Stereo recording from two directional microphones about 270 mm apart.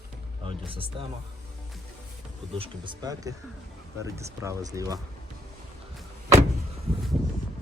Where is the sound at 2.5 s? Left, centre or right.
Centre.